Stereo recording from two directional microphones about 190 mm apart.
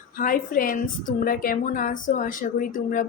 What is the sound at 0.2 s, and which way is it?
A woman's voice, 50° left (ahead or behind).